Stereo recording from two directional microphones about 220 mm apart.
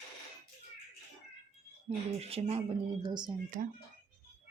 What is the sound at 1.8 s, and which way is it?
A woman's voice, 30° right (ahead or behind).